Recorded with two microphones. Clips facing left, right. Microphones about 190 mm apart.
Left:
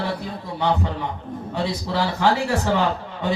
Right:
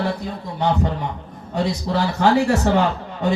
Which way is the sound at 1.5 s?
45° right (ahead or behind).